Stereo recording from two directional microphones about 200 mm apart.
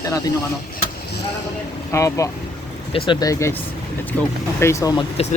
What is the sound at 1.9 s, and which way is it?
Speech, 15° left (ahead or behind).